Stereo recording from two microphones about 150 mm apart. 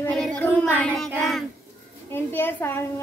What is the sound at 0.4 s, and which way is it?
Child singing, 10° left (ahead or behind).